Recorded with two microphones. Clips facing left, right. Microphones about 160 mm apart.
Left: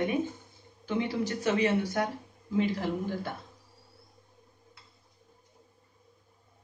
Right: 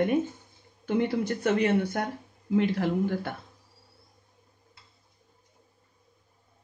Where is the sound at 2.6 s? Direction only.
65° right (ahead or behind).